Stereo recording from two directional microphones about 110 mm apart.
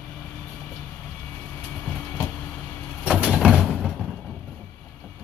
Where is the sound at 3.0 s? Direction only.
5° right (ahead or behind).